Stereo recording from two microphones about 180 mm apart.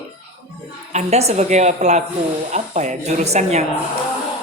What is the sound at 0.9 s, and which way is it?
A woman's voice, 40° right (ahead or behind).